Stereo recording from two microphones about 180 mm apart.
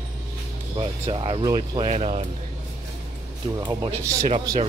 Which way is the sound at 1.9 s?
35° right (ahead or behind).